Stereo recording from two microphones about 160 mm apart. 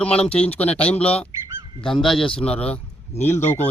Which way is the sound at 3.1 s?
40° left (ahead or behind).